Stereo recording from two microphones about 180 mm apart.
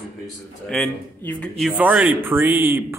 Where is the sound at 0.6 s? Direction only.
5° left (ahead or behind).